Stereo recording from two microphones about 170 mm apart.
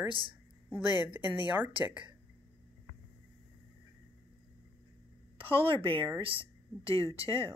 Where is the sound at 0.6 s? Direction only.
10° right (ahead or behind).